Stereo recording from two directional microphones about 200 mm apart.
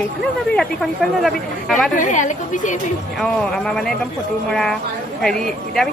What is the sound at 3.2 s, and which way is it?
Speech, 5° left (ahead or behind).